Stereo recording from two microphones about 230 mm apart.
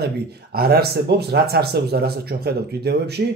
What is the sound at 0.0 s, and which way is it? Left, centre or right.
Speech, right.